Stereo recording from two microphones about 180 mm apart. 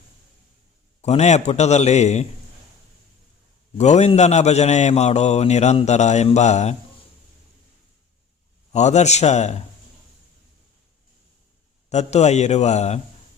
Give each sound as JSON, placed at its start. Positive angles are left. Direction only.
{"t": 1.0, "sound": "a man's voice", "side_deg": 40}
{"t": 3.8, "sound": "a man's voice", "side_deg": 40}
{"t": 8.7, "sound": "a man's voice", "side_deg": 40}
{"t": 11.9, "sound": "a man's voice", "side_deg": 40}